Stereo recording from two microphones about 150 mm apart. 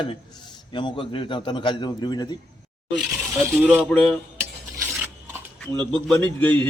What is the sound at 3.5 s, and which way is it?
Speech, 10° right (ahead or behind).